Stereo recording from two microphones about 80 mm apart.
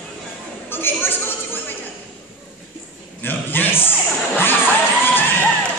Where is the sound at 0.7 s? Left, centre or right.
Left.